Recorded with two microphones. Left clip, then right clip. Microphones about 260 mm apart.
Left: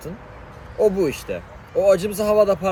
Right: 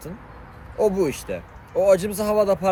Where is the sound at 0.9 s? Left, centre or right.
Centre.